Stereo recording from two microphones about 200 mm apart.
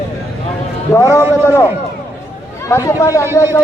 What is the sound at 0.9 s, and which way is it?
A man's voice, 15° left (ahead or behind).